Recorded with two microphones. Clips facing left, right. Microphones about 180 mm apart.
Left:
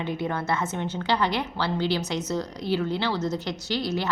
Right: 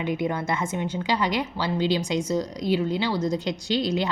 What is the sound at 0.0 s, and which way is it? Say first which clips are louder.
A woman's voice: right 2 dB; 15° right (ahead or behind).